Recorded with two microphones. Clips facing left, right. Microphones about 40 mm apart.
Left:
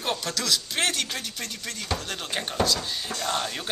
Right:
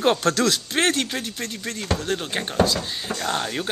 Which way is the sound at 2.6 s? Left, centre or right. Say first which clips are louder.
Right 4 dB; right.